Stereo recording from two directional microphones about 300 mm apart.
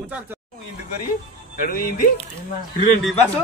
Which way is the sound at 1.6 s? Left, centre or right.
Left.